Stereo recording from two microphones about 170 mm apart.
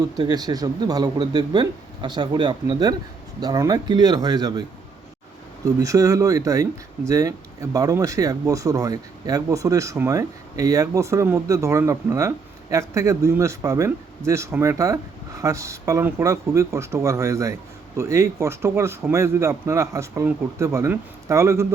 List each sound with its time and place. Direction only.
0.2 s speech: 25° right (ahead or behind)
5.6 s speech: 20° right (ahead or behind)